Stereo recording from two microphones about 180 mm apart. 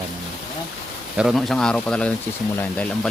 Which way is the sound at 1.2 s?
Centre (ahead or behind).